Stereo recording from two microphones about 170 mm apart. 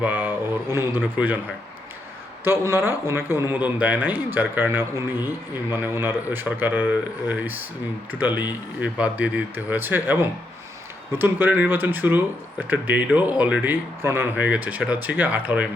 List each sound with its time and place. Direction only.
0.0 s a man's voice: 10° right (ahead or behind)
2.4 s speech: 15° right (ahead or behind)